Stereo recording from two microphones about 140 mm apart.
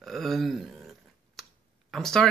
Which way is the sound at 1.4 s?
Centre (ahead or behind).